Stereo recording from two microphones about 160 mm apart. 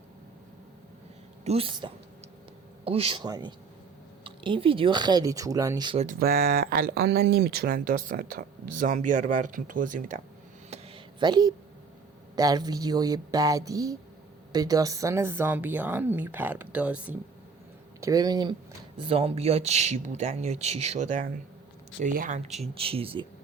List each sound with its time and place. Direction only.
1.5 s speech: 35° right (ahead or behind)
6.1 s speech: 70° right (ahead or behind)
10.7 s a sound: 35° right (ahead or behind)
12.4 s speech: 25° right (ahead or behind); by 17.2 s 10° right (ahead or behind)
18.0 s speech: 25° right (ahead or behind); by 22.4 s 55° right (ahead or behind)
22.7 s speech: 35° right (ahead or behind)